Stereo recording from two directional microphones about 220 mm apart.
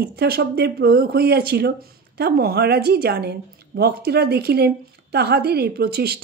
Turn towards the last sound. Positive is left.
turn(degrees=-45)  # may be behind; listen again after turning